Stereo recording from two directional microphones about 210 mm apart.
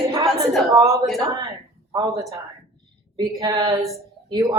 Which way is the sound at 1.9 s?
20° right (ahead or behind).